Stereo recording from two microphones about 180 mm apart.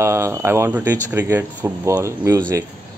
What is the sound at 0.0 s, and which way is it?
Speech, 15° right (ahead or behind).